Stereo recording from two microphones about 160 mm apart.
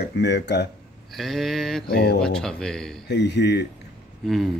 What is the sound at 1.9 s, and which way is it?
Speech, 90° left.